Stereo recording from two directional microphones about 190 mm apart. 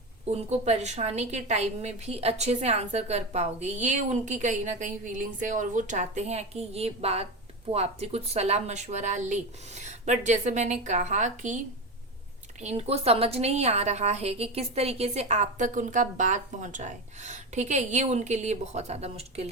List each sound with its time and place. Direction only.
0.3 s a woman's voice: 35° right (ahead or behind)